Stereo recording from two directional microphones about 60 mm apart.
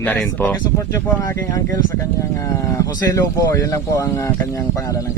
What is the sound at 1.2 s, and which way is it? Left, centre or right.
Speech, left.